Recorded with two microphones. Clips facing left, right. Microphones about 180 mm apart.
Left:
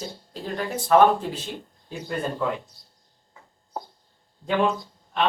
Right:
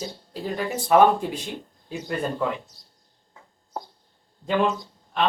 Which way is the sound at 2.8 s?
55° left (ahead or behind).